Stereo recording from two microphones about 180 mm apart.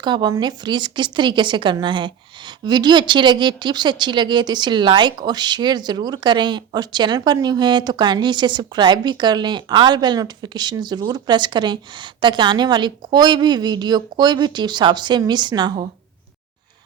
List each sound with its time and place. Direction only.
0.0 s speech: 25° right (ahead or behind)